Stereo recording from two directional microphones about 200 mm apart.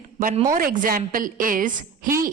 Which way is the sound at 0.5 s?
40° right (ahead or behind).